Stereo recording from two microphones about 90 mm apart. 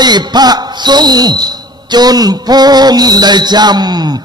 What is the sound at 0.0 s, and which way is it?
Music, 50° right (ahead or behind).